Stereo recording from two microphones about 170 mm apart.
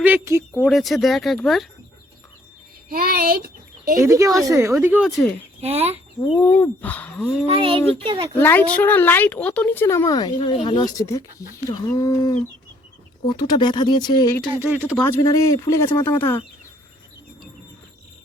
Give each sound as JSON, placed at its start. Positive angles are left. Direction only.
{"t": 0.0, "sound": "speech", "side_deg": -10}
{"t": 0.6, "sound": "speech", "side_deg": 0}
{"t": 2.9, "sound": "speech", "side_deg": -60}
{"t": 3.9, "sound": "speech", "side_deg": -20}
{"t": 5.0, "sound": "speech", "side_deg": 0}
{"t": 5.6, "sound": "a child's voice", "side_deg": -40}
{"t": 6.3, "sound": "a woman's voice", "side_deg": 10}
{"t": 7.4, "sound": "a child's voice", "side_deg": -35}
{"t": 8.4, "sound": "a woman's voice", "side_deg": 10}
{"t": 14.5, "sound": "speech", "side_deg": -10}
{"t": 15.0, "sound": "a woman's voice", "side_deg": 20}